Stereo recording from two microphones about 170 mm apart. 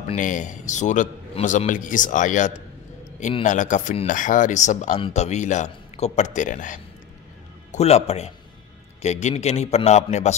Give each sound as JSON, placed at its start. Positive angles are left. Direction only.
{"t": 0.1, "sound": "a man's voice", "side_deg": 50}
{"t": 7.7, "sound": "a man's voice", "side_deg": 40}